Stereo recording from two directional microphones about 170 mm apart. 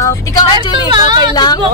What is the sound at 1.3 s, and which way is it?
Speech, 25° left (ahead or behind).